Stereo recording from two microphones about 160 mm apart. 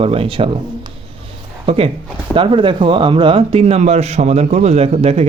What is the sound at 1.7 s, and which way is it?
A man's voice, 40° right (ahead or behind).